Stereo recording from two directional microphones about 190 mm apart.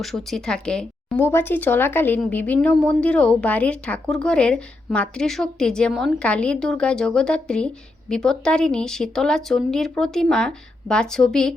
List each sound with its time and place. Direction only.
0.0 s speech: centre (ahead or behind)